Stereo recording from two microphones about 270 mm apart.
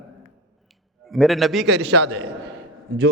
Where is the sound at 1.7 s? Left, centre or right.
Right.